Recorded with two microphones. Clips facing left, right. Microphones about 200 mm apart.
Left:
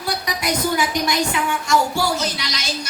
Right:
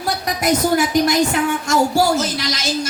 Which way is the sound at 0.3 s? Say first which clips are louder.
Right 6 dB; 45° right (ahead or behind).